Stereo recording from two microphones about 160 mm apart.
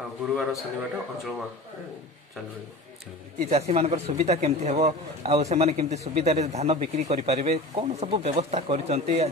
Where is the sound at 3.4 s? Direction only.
40° right (ahead or behind).